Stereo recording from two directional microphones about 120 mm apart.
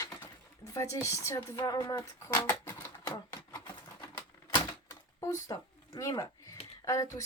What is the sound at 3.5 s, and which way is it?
Typewriter, 35° left (ahead or behind).